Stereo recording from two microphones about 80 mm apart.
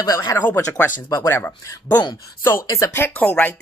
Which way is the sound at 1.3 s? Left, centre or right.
Left.